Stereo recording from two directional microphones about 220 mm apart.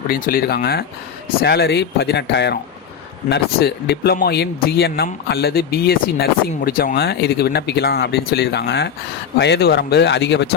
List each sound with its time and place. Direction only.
0.1 s speech: 40° left (ahead or behind)